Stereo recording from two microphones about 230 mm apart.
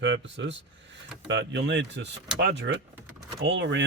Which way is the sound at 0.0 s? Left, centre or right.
Right.